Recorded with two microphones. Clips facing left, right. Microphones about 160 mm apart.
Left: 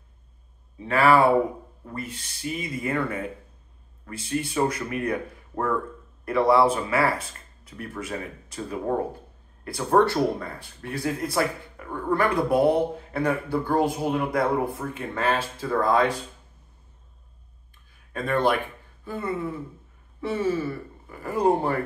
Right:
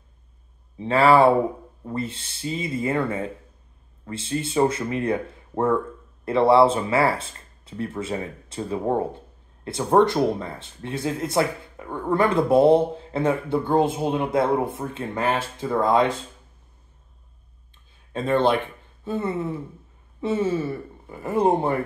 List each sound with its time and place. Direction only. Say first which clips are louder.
0.7 s speech: right 3 dB; 25° right (ahead or behind)
18.1 s speech: right 3 dB; 25° right (ahead or behind)